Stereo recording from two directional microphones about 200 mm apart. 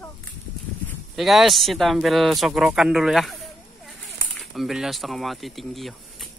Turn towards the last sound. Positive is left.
turn(degrees=0)  # may be behind; listen again after turning